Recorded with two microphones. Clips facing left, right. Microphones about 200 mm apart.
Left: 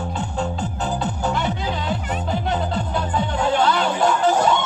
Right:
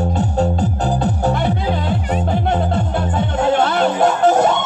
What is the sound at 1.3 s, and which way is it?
Music, 55° right (ahead or behind).